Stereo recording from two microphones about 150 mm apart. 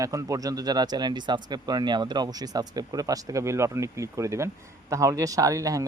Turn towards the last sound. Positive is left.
turn(degrees=-20)  # may be behind; listen again after turning